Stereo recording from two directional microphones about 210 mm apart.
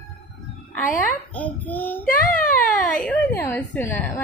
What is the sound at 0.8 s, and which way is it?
Speech, 40° left (ahead or behind).